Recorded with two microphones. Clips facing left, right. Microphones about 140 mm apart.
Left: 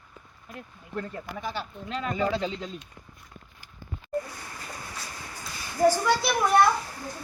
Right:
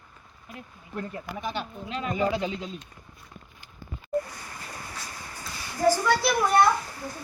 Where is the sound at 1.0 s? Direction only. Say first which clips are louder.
Even; 20° right (ahead or behind).